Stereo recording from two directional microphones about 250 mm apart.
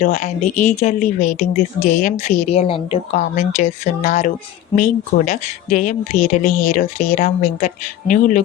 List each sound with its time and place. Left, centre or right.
0.0 s speech: left